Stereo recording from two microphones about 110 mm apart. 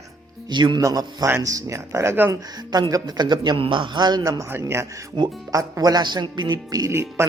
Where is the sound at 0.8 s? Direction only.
30° right (ahead or behind).